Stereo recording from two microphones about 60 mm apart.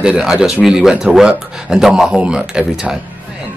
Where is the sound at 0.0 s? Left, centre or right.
Centre.